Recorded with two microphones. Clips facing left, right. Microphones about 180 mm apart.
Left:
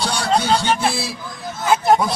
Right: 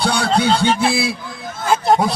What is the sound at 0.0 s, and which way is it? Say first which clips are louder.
Music: right 4 dB; 60° right (ahead or behind).